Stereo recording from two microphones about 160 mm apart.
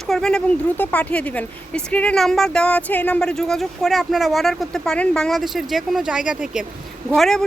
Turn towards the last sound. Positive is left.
turn(degrees=0)  # may be behind; listen again after turning